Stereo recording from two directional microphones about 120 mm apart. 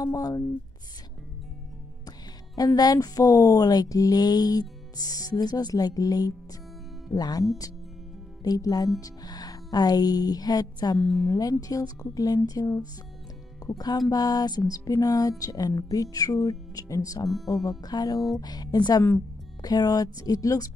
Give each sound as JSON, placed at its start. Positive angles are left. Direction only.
{"t": 0.0, "sound": "speech", "side_deg": 30}
{"t": 2.0, "sound": "speech", "side_deg": 35}
{"t": 8.5, "sound": "speech", "side_deg": 30}
{"t": 11.0, "sound": "speech", "side_deg": 0}
{"t": 11.2, "sound": "speech", "side_deg": 30}